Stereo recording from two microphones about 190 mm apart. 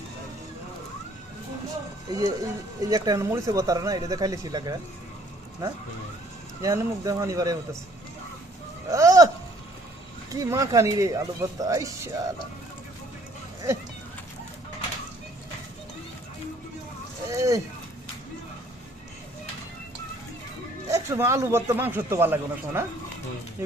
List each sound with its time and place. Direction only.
2.0 s speech: 20° right (ahead or behind)
8.9 s a sound: 15° right (ahead or behind)
10.3 s speech: 15° right (ahead or behind)
17.2 s speech: 15° right (ahead or behind)
20.8 s speech: 15° right (ahead or behind)